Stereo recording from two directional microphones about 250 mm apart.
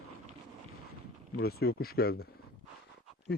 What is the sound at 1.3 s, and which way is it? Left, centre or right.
A man's voice, left.